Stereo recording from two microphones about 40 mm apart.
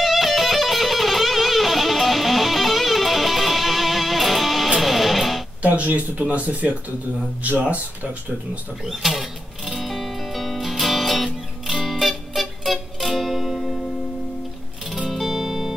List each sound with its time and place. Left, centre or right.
0.0 s music: centre
5.6 s speech: right
8.8 s music: centre
15.0 s music: centre